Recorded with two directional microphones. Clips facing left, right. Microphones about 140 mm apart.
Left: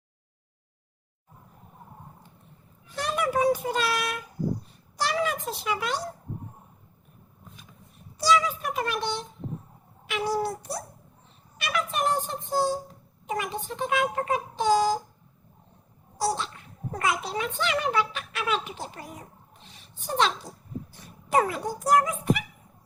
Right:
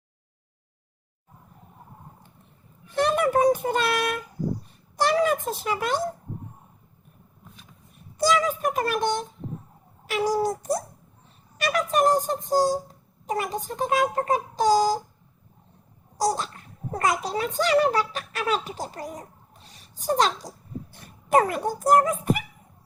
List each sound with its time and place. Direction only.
2.9 s a child's voice: 55° right (ahead or behind)
8.2 s a child's voice: 45° right (ahead or behind)
16.1 s a child's voice: 40° right (ahead or behind)
19.6 s a sound: 40° right (ahead or behind)
21.2 s speech: 50° right (ahead or behind)